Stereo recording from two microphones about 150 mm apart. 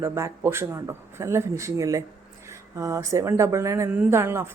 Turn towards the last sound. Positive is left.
turn(degrees=-15)  # may be behind; listen again after turning